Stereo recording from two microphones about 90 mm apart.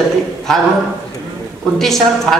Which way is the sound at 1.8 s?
5° left (ahead or behind).